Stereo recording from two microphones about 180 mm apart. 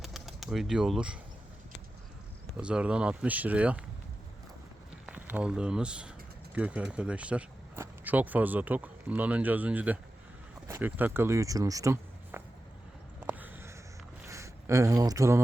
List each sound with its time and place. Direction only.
0.0 s bird: centre (ahead or behind)
2.6 s speech: 5° right (ahead or behind)
5.0 s speech: 10° right (ahead or behind)
13.1 s a sound: 10° right (ahead or behind)
14.3 s speech: 15° right (ahead or behind)